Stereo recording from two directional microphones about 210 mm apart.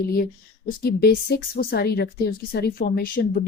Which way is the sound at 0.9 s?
50° left (ahead or behind).